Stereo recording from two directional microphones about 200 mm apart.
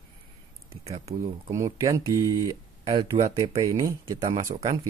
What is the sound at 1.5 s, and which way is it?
Speech, 15° right (ahead or behind).